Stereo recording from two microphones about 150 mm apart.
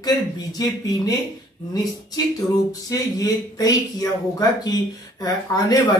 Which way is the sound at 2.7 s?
25° left (ahead or behind).